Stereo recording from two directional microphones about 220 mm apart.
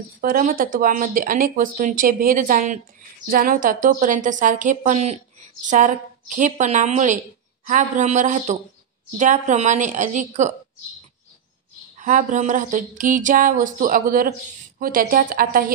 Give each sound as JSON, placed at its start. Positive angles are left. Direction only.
{"t": 0.2, "sound": "speech", "side_deg": -40}
{"t": 12.0, "sound": "speech", "side_deg": -35}